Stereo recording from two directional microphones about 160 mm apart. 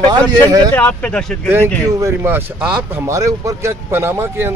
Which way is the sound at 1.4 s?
15° right (ahead or behind).